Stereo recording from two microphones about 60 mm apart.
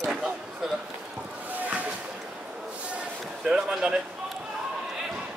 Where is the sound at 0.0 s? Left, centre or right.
Centre.